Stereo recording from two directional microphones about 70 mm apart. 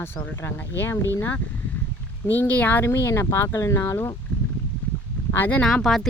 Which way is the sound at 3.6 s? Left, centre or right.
Left.